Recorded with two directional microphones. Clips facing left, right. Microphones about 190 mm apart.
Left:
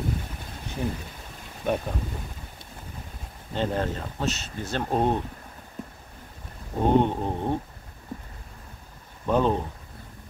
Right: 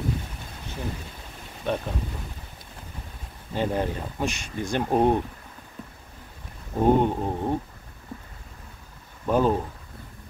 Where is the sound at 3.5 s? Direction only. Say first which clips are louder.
Right 1 dB; 10° right (ahead or behind).